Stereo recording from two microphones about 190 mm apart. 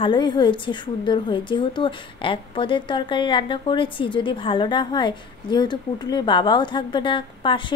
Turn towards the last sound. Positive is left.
turn(degrees=25)  # may be behind; listen again after turning